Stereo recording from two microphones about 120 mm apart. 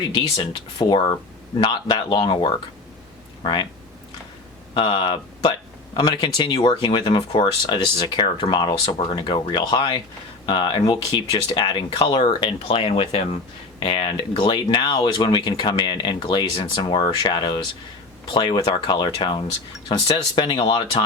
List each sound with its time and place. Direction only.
0.1 s speech: 40° left (ahead or behind)
4.7 s speech: 40° left (ahead or behind)